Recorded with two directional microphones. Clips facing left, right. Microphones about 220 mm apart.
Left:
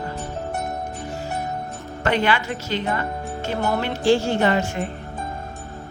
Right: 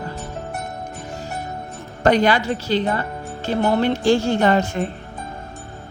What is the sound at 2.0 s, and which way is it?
Speech, 40° right (ahead or behind).